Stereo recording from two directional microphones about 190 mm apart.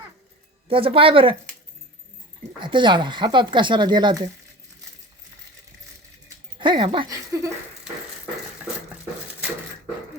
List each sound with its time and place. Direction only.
0.7 s speech: 30° right (ahead or behind)
2.6 s speech: 25° right (ahead or behind)
6.6 s speech: 25° right (ahead or behind)